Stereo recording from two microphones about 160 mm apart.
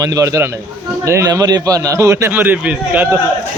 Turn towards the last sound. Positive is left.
turn(degrees=-10)  # may be behind; listen again after turning